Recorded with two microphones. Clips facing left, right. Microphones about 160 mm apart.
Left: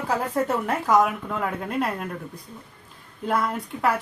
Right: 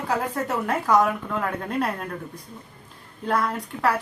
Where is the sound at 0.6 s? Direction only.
Centre (ahead or behind).